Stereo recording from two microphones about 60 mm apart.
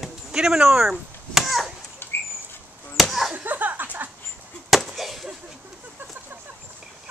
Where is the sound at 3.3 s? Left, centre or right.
Right.